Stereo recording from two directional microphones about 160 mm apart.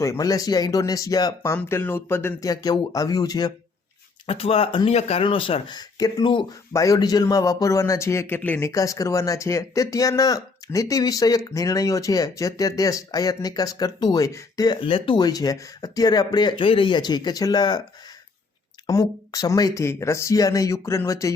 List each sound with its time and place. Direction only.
0.0 s speech: 20° left (ahead or behind)
4.3 s speech: 35° left (ahead or behind)
18.9 s speech: 20° left (ahead or behind)